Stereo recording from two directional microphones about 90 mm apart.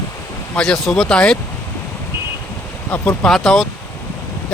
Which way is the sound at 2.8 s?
25° left (ahead or behind).